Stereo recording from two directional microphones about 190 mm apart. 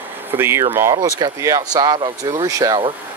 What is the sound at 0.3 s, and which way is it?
Speech, 10° right (ahead or behind).